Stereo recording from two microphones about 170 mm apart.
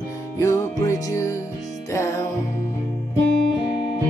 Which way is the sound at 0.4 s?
15° left (ahead or behind).